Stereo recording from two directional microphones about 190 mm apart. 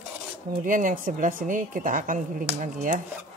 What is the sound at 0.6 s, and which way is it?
A woman's voice, 45° right (ahead or behind).